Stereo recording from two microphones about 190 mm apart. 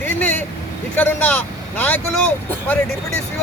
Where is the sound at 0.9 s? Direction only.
10° left (ahead or behind).